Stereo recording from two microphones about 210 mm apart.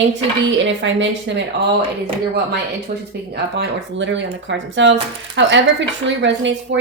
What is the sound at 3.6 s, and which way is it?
Speech, 60° right (ahead or behind).